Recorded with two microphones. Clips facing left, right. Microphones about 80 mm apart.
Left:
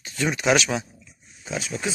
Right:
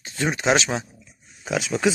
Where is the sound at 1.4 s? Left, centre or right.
Right.